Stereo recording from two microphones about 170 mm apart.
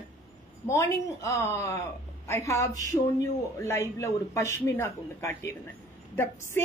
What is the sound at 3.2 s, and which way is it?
Speech, 15° left (ahead or behind).